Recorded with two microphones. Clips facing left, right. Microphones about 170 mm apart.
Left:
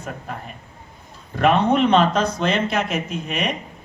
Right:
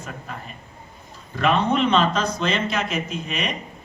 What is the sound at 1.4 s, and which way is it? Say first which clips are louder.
Speech: left 3 dB; 55° left (ahead or behind).